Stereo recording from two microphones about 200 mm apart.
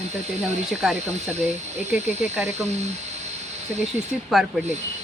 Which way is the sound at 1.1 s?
35° right (ahead or behind).